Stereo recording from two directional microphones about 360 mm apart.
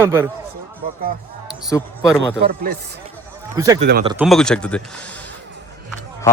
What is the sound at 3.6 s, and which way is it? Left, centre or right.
Speech, centre.